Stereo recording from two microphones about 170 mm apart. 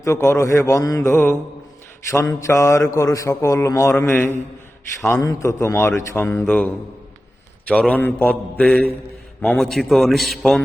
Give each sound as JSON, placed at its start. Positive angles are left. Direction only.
{"t": 0.0, "sound": "speech", "side_deg": 15}
{"t": 7.7, "sound": "a man's voice", "side_deg": 10}